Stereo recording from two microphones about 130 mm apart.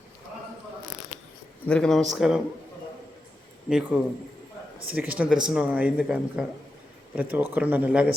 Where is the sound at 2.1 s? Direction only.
5° right (ahead or behind).